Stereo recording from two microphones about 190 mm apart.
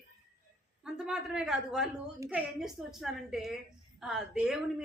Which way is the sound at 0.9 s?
5° right (ahead or behind).